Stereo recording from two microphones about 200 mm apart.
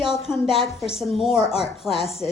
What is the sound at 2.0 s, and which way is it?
Speech, 30° left (ahead or behind).